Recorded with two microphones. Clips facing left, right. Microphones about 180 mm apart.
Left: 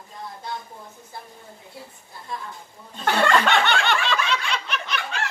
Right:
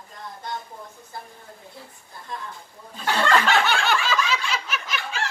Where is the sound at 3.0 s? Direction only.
5° right (ahead or behind).